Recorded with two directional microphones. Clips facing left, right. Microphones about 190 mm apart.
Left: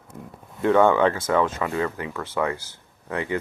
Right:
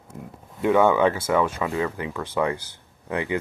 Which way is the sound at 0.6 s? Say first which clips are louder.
Left 1 dB; 10° right (ahead or behind).